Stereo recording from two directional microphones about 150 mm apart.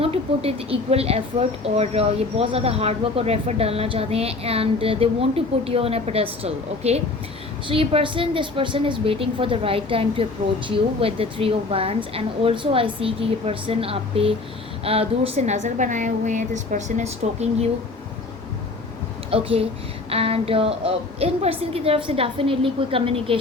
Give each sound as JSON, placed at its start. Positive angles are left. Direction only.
{"t": 0.0, "sound": "a woman's voice", "side_deg": -40}
{"t": 19.3, "sound": "a woman's voice", "side_deg": -40}